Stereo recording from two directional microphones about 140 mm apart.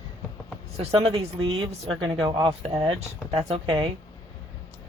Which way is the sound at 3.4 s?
45° right (ahead or behind).